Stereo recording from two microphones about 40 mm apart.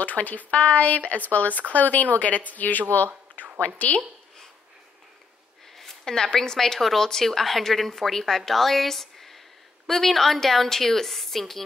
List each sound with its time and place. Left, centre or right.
0.0 s speech: left
5.8 s a woman's voice: centre